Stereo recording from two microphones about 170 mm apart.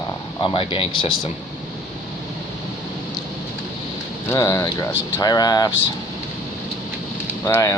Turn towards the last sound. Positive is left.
turn(degrees=15)  # may be behind; listen again after turning